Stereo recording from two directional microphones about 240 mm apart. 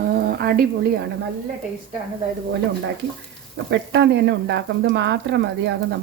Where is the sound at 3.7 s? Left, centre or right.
Right.